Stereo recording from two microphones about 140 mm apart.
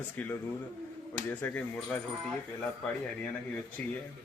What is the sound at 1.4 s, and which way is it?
Speech, 10° left (ahead or behind).